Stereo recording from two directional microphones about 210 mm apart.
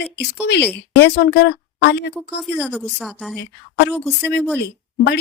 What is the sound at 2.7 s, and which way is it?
Speech, centre (ahead or behind).